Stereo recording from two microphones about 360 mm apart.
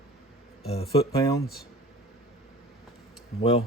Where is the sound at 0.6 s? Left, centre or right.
Centre.